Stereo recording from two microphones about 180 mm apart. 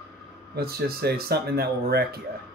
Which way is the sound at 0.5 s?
60° right (ahead or behind).